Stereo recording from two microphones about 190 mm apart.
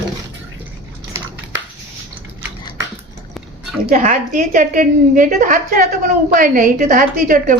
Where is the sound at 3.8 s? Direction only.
40° right (ahead or behind).